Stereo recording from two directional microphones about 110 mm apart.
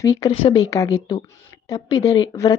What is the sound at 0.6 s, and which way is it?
Speech, 30° left (ahead or behind).